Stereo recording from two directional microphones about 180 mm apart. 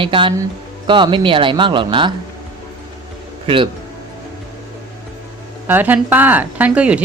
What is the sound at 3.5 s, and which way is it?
Speech, 30° right (ahead or behind).